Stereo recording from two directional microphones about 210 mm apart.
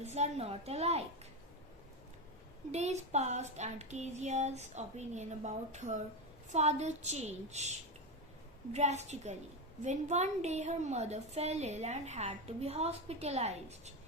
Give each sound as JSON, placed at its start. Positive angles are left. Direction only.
{"t": 0.0, "sound": "a woman's voice", "side_deg": -30}
{"t": 2.7, "sound": "a woman's voice", "side_deg": -30}
{"t": 8.7, "sound": "a woman's voice", "side_deg": -30}